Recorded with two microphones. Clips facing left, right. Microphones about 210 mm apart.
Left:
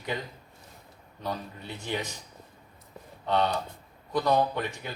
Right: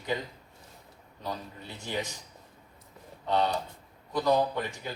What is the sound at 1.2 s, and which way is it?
Speech, 60° left (ahead or behind).